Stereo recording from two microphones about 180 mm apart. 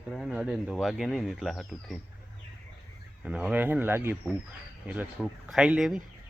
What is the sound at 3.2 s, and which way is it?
Speech, 5° right (ahead or behind).